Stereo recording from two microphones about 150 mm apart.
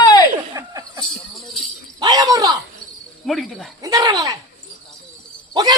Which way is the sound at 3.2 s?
Centre (ahead or behind).